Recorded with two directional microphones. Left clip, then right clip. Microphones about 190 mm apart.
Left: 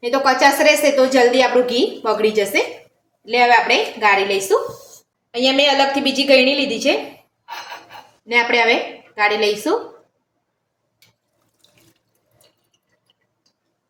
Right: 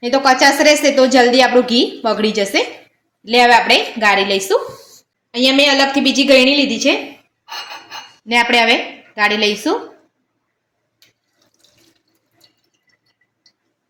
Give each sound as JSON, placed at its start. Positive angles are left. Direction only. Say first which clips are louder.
{"t": 0.0, "sound": "a woman's voice", "louder": "right 3 dB", "side_deg": -50}
{"t": 8.3, "sound": "a woman's voice", "louder": "right 3 dB", "side_deg": -50}